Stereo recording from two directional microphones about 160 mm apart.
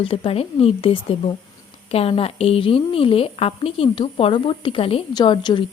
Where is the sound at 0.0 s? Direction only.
35° left (ahead or behind).